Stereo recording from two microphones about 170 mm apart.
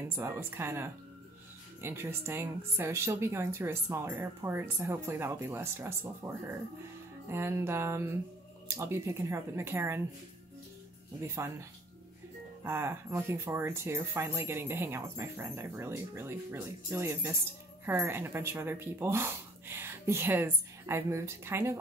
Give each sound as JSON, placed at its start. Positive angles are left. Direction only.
{"t": 0.1, "sound": "speech", "side_deg": -15}
{"t": 11.1, "sound": "speech", "side_deg": -15}
{"t": 12.6, "sound": "speech", "side_deg": -15}